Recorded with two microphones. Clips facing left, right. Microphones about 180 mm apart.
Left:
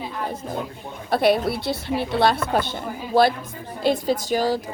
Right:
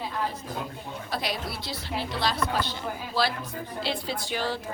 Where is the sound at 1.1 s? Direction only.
60° left (ahead or behind).